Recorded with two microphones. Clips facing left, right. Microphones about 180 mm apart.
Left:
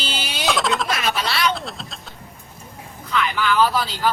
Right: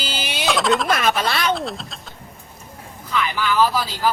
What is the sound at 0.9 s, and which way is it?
Speech, 50° right (ahead or behind).